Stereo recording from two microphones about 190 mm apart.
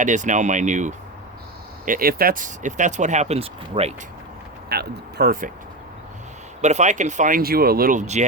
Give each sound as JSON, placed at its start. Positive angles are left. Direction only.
{"t": 0.0, "sound": "speech", "side_deg": -40}
{"t": 4.7, "sound": "speech", "side_deg": -55}
{"t": 6.6, "sound": "speech", "side_deg": -40}